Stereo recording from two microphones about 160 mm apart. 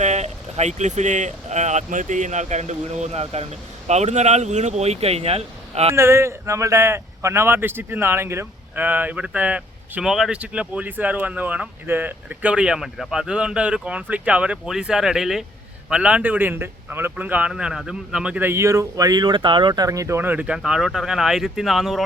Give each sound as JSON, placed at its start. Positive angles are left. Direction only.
{"t": 0.0, "sound": "speech", "side_deg": -45}
{"t": 5.9, "sound": "speech", "side_deg": -15}